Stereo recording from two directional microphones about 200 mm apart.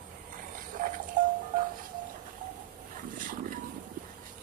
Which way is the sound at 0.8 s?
40° right (ahead or behind).